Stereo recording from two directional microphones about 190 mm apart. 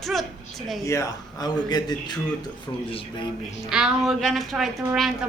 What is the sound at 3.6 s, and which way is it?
A woman's voice, 5° right (ahead or behind).